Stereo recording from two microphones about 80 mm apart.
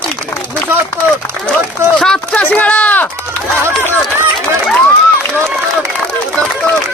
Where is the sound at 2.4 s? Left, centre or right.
Centre.